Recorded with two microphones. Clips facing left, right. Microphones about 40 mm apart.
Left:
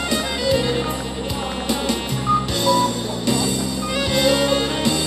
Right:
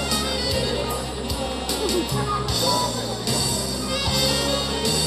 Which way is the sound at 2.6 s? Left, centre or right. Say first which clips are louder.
Left 5 dB; left.